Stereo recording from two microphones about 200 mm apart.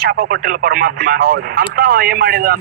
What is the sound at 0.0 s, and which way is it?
Speech, 50° right (ahead or behind).